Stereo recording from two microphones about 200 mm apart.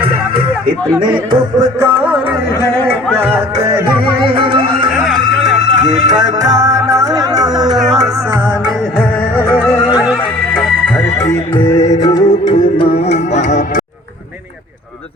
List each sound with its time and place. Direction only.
0.0 s music: 25° right (ahead or behind)
2.7 s music: 5° left (ahead or behind)
4.2 s music: 25° right (ahead or behind)
4.9 s music: centre (ahead or behind)
6.1 s music: 20° right (ahead or behind)
9.7 s music: 5° right (ahead or behind); by 13.8 s 40° left (ahead or behind)